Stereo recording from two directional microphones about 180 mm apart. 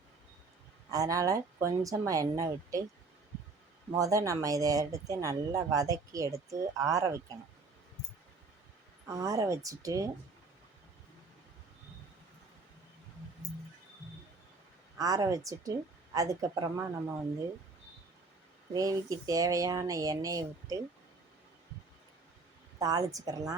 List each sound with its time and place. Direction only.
0.9 s speech: 20° right (ahead or behind)
3.9 s speech: 20° right (ahead or behind)
9.0 s speech: 20° right (ahead or behind)
14.9 s speech: 20° right (ahead or behind)
18.7 s speech: 20° right (ahead or behind)
22.8 s speech: 20° right (ahead or behind)